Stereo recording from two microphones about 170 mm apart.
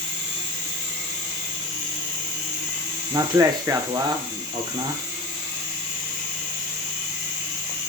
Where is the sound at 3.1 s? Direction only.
20° right (ahead or behind).